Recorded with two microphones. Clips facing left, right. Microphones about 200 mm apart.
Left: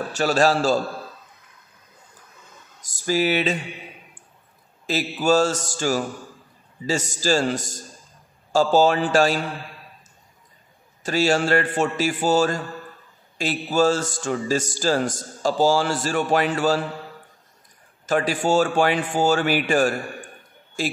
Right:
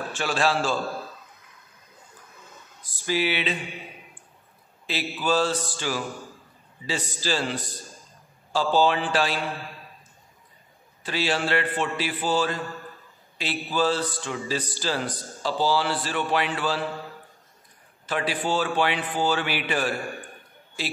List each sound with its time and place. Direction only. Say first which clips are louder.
0.1 s a man's voice: left 6 dB; 40° left (ahead or behind)
2.8 s speech: left 4 dB; 45° left (ahead or behind)
4.8 s speech: left 6 dB; 45° left (ahead or behind)
11.0 s speech: left 6 dB; 45° left (ahead or behind)
18.0 s speech: left 6 dB; 45° left (ahead or behind)